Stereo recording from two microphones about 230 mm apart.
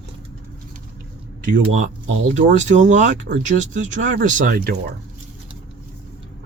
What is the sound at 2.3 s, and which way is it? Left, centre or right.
Speech, right.